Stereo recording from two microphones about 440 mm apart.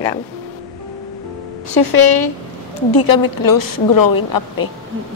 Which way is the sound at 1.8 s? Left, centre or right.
Left.